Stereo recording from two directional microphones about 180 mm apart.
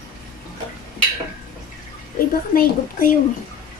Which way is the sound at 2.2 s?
55° left (ahead or behind).